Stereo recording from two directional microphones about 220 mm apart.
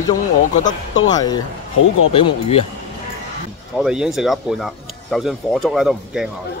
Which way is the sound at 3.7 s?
5° right (ahead or behind).